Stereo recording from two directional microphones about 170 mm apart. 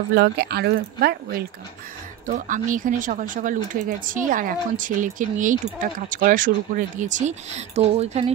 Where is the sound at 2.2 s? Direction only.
50° right (ahead or behind).